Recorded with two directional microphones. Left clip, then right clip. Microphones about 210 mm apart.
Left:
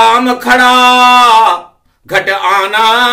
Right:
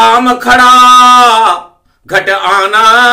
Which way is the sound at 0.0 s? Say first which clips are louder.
Right 2 dB; centre (ahead or behind).